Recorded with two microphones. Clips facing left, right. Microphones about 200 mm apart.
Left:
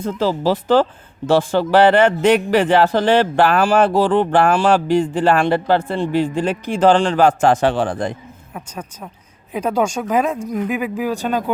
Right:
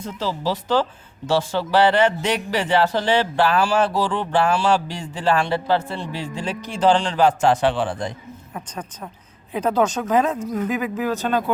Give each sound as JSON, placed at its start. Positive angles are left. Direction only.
{"t": 0.0, "sound": "speech", "side_deg": 50}
{"t": 8.5, "sound": "speech", "side_deg": 10}